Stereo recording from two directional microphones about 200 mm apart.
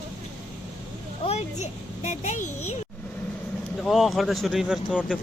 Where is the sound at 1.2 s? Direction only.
30° left (ahead or behind).